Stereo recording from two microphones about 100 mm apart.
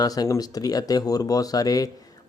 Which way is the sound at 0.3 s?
40° left (ahead or behind).